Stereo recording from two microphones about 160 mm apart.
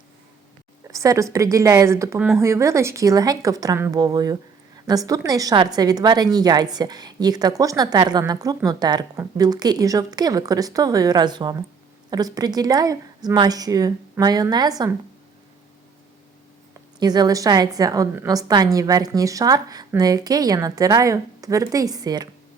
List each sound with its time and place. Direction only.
0.9 s speech: 20° right (ahead or behind)
17.0 s speech: 25° right (ahead or behind)